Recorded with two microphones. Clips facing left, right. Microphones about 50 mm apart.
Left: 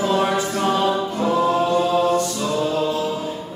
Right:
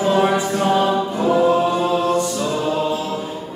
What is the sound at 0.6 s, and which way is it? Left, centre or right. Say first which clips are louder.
Choir: right 2 dB; centre.